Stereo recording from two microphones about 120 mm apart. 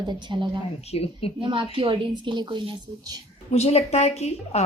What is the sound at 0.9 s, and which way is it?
Speech, 55° left (ahead or behind).